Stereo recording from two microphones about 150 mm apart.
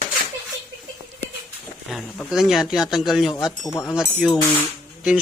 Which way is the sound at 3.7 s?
20° left (ahead or behind).